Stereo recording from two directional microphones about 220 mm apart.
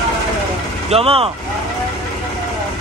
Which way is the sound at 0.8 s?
25° right (ahead or behind).